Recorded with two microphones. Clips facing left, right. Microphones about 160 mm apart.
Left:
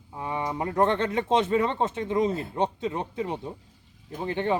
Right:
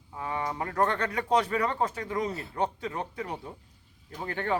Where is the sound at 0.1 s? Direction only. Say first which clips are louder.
Left 2 dB; 20° left (ahead or behind).